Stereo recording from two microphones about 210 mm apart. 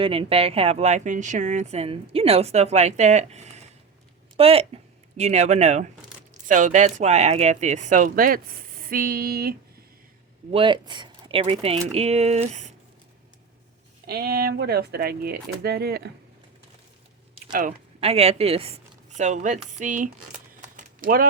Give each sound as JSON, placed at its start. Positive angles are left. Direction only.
{"t": 0.0, "sound": "speech", "side_deg": -25}
{"t": 10.5, "sound": "speech", "side_deg": -25}
{"t": 14.1, "sound": "speech", "side_deg": -45}
{"t": 17.5, "sound": "speech", "side_deg": -35}
{"t": 20.6, "sound": "a sound", "side_deg": -40}